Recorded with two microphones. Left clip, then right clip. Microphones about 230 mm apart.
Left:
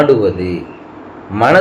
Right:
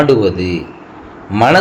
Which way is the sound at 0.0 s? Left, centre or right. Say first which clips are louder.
Even; right.